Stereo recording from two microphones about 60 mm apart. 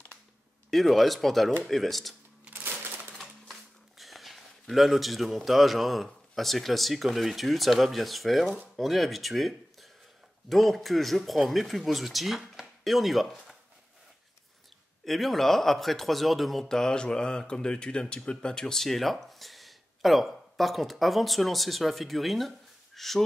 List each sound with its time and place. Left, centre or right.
0.7 s speech: centre
2.5 s typewriter: right
4.0 s speech: centre
15.0 s speech: centre